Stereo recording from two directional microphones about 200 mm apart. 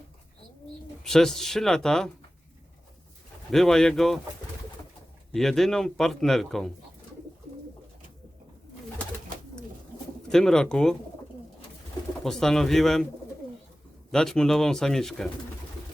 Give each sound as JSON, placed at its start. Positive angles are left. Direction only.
{"t": 1.0, "sound": "a man's voice", "side_deg": 0}
{"t": 3.5, "sound": "a man's voice", "side_deg": 0}
{"t": 5.3, "sound": "a man's voice", "side_deg": 0}
{"t": 10.2, "sound": "a man's voice", "side_deg": 0}
{"t": 12.2, "sound": "a man's voice", "side_deg": 0}
{"t": 14.1, "sound": "a man's voice", "side_deg": 5}